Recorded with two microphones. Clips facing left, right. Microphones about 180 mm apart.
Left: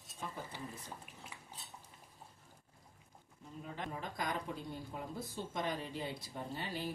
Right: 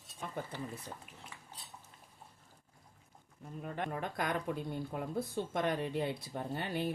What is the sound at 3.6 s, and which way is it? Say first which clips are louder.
Speech: right 5 dB; 60° right (ahead or behind).